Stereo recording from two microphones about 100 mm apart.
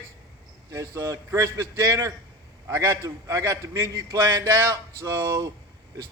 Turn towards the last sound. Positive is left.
turn(degrees=-40)  # may be behind; listen again after turning